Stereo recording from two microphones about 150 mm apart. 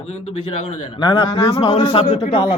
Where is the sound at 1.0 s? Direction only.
35° left (ahead or behind).